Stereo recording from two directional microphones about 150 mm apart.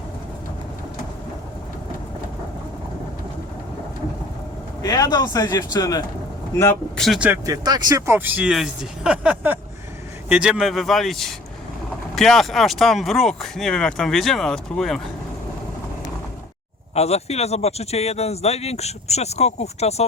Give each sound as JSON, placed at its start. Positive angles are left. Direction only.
{"t": 4.8, "sound": "speech", "side_deg": 25}
{"t": 6.9, "sound": "speech", "side_deg": 0}
{"t": 7.4, "sound": "speech", "side_deg": -25}
{"t": 16.9, "sound": "speech", "side_deg": 45}